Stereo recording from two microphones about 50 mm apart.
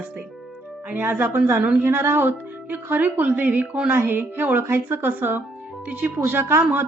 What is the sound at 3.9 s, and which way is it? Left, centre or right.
A woman's voice, right.